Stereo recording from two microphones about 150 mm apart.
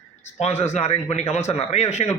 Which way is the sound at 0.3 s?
45° left (ahead or behind).